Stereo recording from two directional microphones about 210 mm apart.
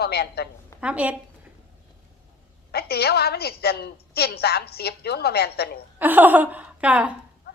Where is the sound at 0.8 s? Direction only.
5° right (ahead or behind).